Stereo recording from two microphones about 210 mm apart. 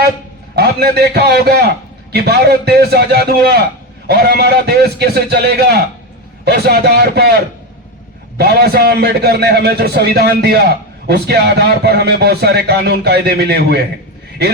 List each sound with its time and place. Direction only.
0.5 s a man's voice: 50° right (ahead or behind)
8.4 s speech: 50° right (ahead or behind)